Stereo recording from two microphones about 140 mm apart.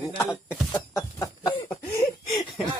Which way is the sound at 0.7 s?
20° left (ahead or behind).